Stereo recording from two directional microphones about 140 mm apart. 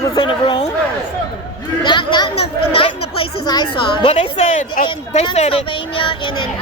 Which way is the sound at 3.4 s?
30° left (ahead or behind).